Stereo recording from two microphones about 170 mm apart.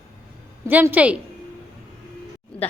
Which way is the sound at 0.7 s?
10° right (ahead or behind).